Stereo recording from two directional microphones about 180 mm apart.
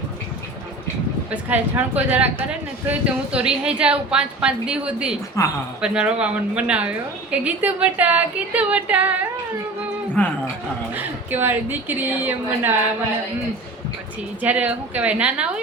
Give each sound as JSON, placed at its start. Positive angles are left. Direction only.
{"t": 1.3, "sound": "a woman's voice", "side_deg": -10}
{"t": 3.3, "sound": "a woman's voice", "side_deg": -5}
{"t": 5.4, "sound": "speech", "side_deg": 15}
{"t": 5.8, "sound": "a woman's voice", "side_deg": -5}
{"t": 10.2, "sound": "speech", "side_deg": 10}
{"t": 10.9, "sound": "a woman's voice", "side_deg": -10}
{"t": 14.4, "sound": "a woman's voice", "side_deg": -10}